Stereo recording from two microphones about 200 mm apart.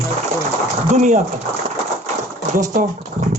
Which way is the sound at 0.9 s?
35° right (ahead or behind).